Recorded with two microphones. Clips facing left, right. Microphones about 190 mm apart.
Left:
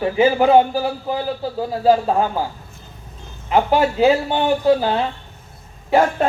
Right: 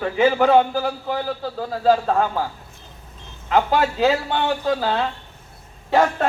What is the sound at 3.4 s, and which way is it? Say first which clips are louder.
A man's voice: left 2 dB; 10° left (ahead or behind).